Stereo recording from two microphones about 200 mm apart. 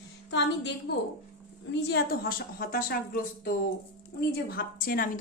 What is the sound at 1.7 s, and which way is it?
A woman's voice, 55° left (ahead or behind).